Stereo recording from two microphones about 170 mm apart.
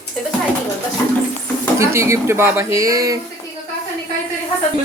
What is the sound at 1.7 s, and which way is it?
Speech, 15° right (ahead or behind).